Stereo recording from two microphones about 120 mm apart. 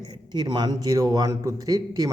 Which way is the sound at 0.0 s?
35° right (ahead or behind).